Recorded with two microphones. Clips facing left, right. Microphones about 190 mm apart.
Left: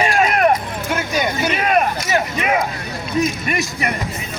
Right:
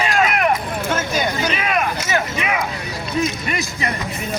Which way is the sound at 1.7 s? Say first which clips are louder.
Left 5 dB; 40° left (ahead or behind).